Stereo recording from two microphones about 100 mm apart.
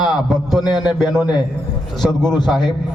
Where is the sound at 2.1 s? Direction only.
45° left (ahead or behind).